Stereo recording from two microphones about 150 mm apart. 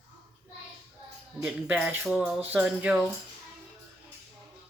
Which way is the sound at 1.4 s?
5° right (ahead or behind).